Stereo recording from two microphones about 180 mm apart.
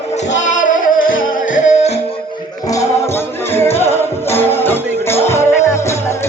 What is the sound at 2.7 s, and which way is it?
Music, 15° left (ahead or behind).